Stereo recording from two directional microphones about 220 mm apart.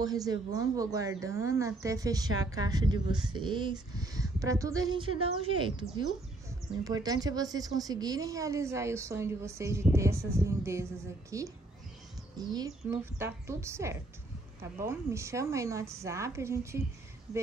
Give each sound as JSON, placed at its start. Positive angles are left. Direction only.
{"t": 0.0, "sound": "speech", "side_deg": -15}
{"t": 17.3, "sound": "speech", "side_deg": 0}